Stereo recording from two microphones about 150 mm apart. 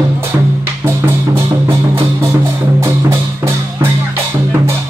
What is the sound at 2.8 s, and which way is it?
Music, 20° right (ahead or behind).